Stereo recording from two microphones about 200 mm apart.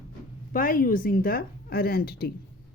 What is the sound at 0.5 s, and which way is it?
A woman's voice, 45° left (ahead or behind).